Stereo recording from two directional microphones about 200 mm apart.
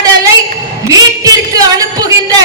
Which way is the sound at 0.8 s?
20° right (ahead or behind).